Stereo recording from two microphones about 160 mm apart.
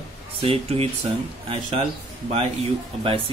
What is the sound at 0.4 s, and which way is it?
Speech, 35° right (ahead or behind).